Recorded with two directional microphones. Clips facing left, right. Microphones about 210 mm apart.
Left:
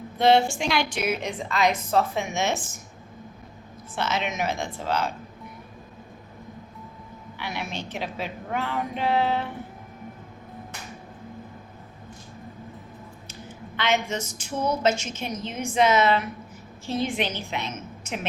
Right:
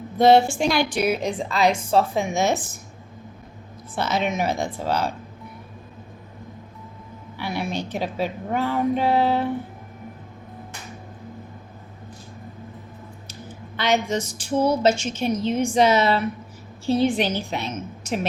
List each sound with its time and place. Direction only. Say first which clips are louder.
0.2 s a woman's voice: right 4 dB; 35° right (ahead or behind)
3.9 s a woman's voice: right 4 dB; 35° right (ahead or behind)
7.3 s a woman's voice: right 6 dB; 35° right (ahead or behind)
13.7 s a woman's voice: right 4 dB; 35° right (ahead or behind)